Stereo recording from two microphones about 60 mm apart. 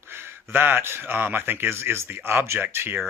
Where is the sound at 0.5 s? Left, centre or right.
Right.